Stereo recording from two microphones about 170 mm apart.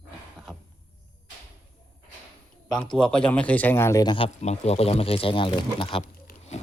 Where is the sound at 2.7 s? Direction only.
5° left (ahead or behind); by 6.0 s 30° left (ahead or behind).